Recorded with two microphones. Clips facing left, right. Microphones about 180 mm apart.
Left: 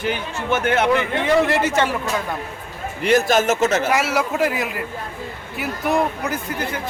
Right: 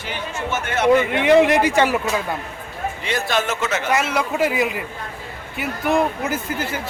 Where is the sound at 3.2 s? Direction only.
45° left (ahead or behind).